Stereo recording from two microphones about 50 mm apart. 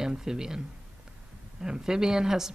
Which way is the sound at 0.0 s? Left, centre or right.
Centre.